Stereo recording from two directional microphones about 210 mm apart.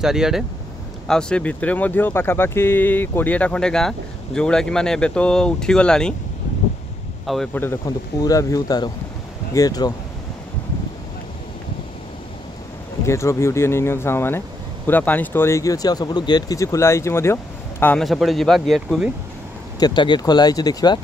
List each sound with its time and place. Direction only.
0.0 s speech: centre (ahead or behind)
7.2 s speech: 5° left (ahead or behind)
13.0 s speech: 15° left (ahead or behind)
19.8 s speech: 20° left (ahead or behind)